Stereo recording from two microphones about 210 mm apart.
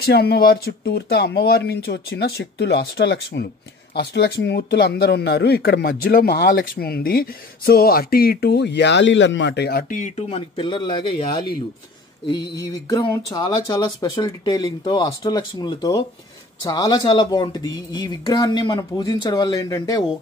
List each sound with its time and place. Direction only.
0.0 s speech: 50° left (ahead or behind); by 11.2 s 25° left (ahead or behind)
12.9 s speech: 20° left (ahead or behind)